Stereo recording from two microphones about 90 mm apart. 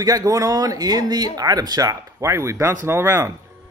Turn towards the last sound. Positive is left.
turn(degrees=-30)  # may be behind; listen again after turning